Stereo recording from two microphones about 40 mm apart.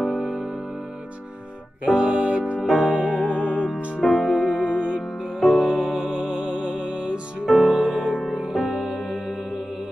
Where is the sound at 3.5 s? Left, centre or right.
Right.